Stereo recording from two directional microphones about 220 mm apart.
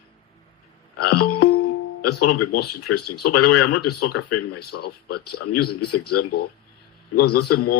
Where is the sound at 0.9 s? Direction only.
90° left.